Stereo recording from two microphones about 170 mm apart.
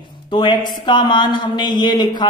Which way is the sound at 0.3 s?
25° left (ahead or behind).